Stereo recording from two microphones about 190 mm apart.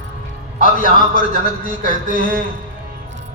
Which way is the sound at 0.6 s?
45° left (ahead or behind).